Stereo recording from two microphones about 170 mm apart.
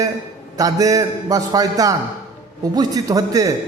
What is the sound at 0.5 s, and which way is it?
A man's voice, 20° right (ahead or behind).